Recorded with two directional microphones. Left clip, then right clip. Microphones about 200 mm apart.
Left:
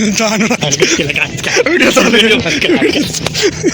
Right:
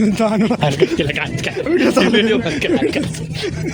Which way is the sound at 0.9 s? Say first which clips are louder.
Left 6 dB; 20° left (ahead or behind).